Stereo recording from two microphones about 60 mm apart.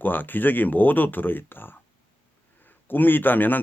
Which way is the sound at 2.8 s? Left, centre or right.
Left.